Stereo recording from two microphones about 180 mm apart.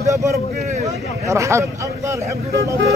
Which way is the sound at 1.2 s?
15° right (ahead or behind).